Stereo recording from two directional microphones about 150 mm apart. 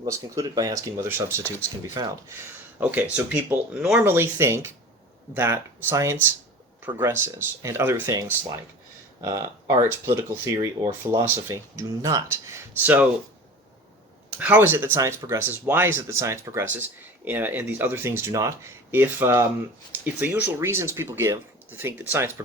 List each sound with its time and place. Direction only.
0.0 s speech: 20° right (ahead or behind)
2.8 s speech: 10° right (ahead or behind)
14.3 s speech: 10° right (ahead or behind)